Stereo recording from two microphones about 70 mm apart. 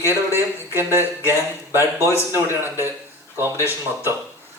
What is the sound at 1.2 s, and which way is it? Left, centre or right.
Speech, left.